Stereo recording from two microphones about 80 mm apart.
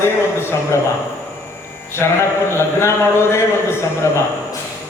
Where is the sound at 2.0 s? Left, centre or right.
Left.